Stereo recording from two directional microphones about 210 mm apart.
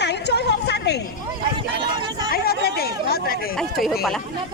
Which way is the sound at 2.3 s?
45° left (ahead or behind).